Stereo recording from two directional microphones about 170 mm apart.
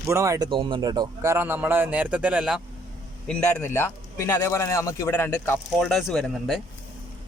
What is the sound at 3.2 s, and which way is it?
A man's voice, 5° left (ahead or behind).